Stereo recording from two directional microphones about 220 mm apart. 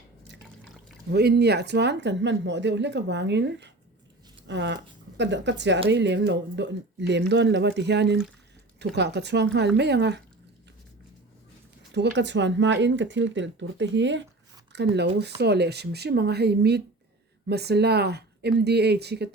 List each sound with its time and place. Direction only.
1.1 s speech: 50° right (ahead or behind)
11.9 s speech: 50° right (ahead or behind)